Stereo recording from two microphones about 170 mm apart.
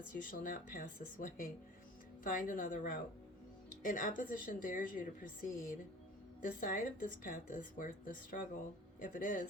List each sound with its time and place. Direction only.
0.2 s a woman's voice: 55° left (ahead or behind)